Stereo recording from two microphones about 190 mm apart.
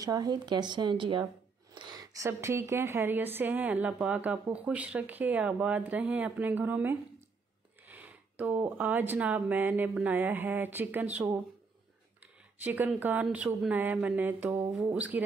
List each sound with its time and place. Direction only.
0.0 s speech: 20° right (ahead or behind)